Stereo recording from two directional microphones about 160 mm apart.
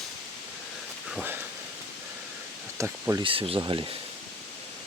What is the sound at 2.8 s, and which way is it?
Speech, 20° right (ahead or behind).